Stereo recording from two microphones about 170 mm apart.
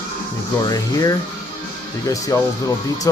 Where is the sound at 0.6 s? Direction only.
20° left (ahead or behind).